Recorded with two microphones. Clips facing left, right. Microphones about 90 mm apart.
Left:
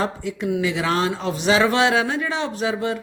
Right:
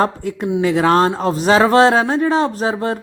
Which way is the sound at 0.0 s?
45° right (ahead or behind).